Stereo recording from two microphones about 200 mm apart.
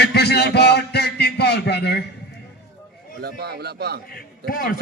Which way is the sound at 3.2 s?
50° right (ahead or behind).